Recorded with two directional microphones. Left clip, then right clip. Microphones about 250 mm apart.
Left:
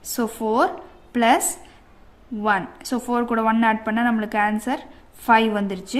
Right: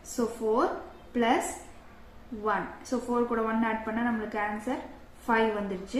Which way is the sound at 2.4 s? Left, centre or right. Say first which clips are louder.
Left 8 dB; left.